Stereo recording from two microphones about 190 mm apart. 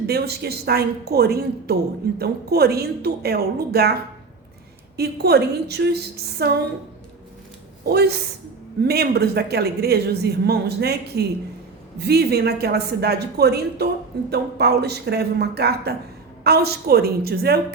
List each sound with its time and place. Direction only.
0.1 s speech: 55° right (ahead or behind)
4.9 s speech: 60° right (ahead or behind)
7.9 s speech: 60° right (ahead or behind)